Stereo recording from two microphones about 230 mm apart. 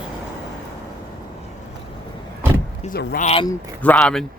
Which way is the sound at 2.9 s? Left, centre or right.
Left.